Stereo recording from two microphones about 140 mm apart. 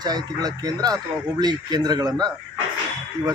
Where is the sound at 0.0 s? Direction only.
30° right (ahead or behind).